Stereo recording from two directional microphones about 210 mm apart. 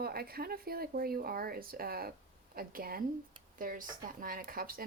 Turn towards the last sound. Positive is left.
turn(degrees=-45)  # may be behind; listen again after turning